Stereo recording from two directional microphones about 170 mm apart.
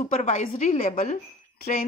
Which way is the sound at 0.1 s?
40° left (ahead or behind).